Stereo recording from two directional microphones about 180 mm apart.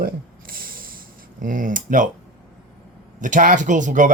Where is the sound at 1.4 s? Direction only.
50° right (ahead or behind).